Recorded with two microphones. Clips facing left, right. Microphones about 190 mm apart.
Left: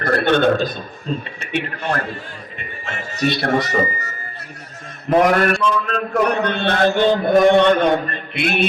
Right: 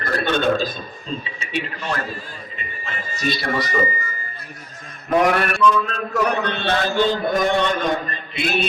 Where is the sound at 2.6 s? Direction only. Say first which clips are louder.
Left 3 dB; 70° left (ahead or behind).